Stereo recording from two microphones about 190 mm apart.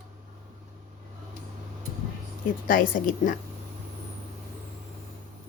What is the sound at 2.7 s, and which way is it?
Speech, 45° left (ahead or behind).